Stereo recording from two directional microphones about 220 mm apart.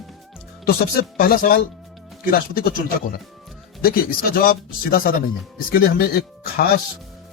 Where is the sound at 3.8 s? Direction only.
40° left (ahead or behind).